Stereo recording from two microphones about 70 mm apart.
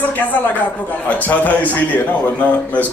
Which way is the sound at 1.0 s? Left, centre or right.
Left.